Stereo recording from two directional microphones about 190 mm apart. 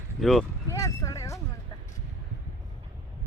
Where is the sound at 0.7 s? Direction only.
15° left (ahead or behind).